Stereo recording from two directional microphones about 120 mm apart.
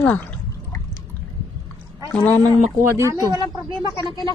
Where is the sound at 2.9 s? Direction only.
30° right (ahead or behind).